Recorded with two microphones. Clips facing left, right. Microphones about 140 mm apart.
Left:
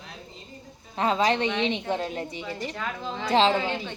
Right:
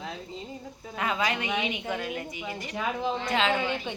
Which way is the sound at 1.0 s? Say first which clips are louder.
Left 6 dB; 30° left (ahead or behind).